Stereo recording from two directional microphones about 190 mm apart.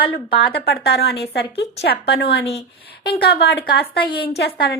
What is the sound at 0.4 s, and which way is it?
A woman's voice, 55° left (ahead or behind).